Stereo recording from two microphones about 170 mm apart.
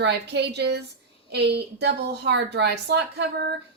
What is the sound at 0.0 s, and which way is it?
A woman's voice, 80° right.